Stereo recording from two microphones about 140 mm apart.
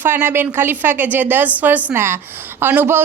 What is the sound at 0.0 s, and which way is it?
A woman's voice, 15° right (ahead or behind).